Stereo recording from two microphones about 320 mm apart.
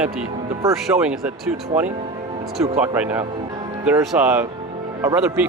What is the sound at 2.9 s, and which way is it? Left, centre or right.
Speech, centre.